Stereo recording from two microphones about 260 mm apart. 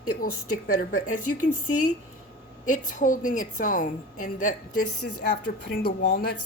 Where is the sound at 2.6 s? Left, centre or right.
Left.